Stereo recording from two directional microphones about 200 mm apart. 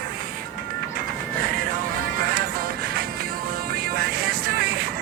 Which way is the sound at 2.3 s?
50° right (ahead or behind).